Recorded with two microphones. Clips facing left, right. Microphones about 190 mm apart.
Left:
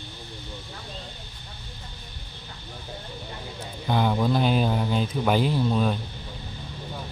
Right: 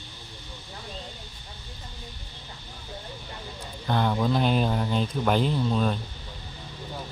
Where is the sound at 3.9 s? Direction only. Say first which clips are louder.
Left 1 dB; 5° left (ahead or behind).